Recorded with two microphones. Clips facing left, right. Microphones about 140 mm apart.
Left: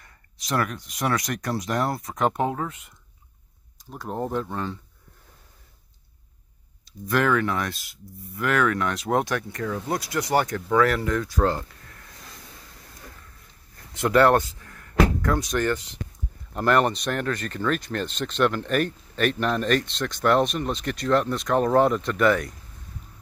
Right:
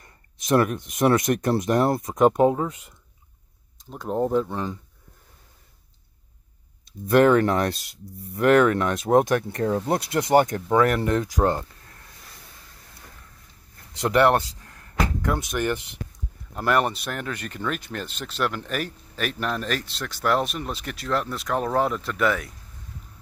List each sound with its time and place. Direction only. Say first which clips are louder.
0.5 s speech: right 6 dB; 20° right (ahead or behind)
3.9 s speech: right 5 dB; centre (ahead or behind)
4.5 s speech: right 1 dB; 15° right (ahead or behind)
7.1 s speech: right 6 dB; 30° right (ahead or behind)
14.0 s speech: left 1 dB; 20° right (ahead or behind); by 22.6 s 5° right (ahead or behind)